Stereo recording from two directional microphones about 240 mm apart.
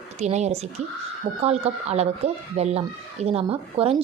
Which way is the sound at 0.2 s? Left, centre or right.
Right.